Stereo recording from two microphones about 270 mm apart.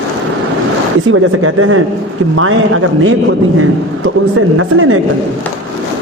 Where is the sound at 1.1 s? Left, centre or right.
Right.